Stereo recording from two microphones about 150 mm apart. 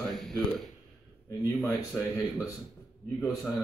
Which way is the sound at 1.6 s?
25° left (ahead or behind).